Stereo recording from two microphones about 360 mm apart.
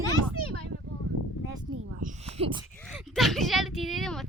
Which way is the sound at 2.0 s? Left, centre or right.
Centre.